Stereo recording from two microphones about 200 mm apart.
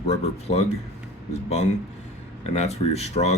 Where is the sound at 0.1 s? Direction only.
30° left (ahead or behind).